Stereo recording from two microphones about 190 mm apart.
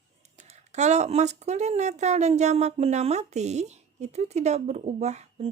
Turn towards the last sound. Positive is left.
turn(degrees=-35)  # may be behind; listen again after turning